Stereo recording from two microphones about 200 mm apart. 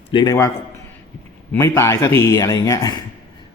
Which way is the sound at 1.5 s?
15° left (ahead or behind).